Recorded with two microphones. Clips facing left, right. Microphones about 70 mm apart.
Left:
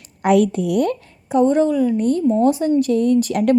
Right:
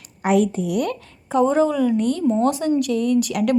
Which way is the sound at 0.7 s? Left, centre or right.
Left.